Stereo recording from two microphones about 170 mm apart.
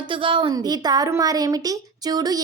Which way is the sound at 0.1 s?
30° right (ahead or behind).